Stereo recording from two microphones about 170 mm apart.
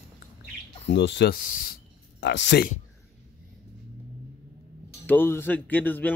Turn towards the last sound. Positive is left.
turn(degrees=10)  # may be behind; listen again after turning